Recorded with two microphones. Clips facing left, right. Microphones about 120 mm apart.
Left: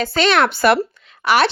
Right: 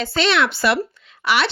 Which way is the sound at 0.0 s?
45° left (ahead or behind).